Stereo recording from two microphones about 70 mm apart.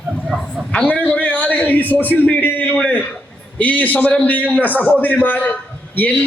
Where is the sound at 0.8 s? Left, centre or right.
Left.